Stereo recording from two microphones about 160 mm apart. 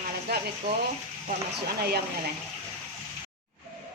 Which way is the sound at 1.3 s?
75° right (ahead or behind).